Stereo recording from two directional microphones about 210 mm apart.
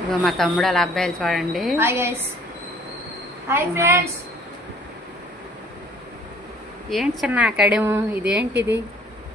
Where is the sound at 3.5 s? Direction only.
10° right (ahead or behind).